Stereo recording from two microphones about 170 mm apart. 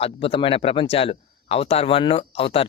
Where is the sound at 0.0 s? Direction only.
35° left (ahead or behind).